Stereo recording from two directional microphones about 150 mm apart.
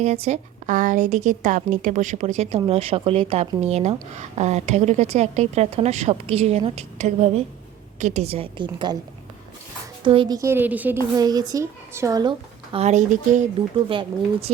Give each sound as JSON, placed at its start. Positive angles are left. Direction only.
{"t": 0.0, "sound": "a woman's voice", "side_deg": -45}
{"t": 10.0, "sound": "a woman's voice", "side_deg": -35}
{"t": 10.3, "sound": "a woman's voice", "side_deg": -15}
{"t": 11.1, "sound": "a woman's voice", "side_deg": -25}
{"t": 12.7, "sound": "speech", "side_deg": -50}
{"t": 13.9, "sound": "a woman's voice", "side_deg": -35}